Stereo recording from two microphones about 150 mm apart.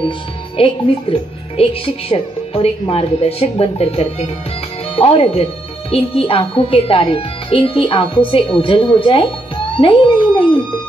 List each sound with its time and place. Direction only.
0.6 s a child's voice: 35° left (ahead or behind)